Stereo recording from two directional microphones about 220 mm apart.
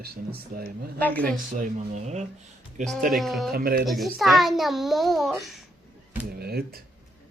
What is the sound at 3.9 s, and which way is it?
A child's voice, centre (ahead or behind).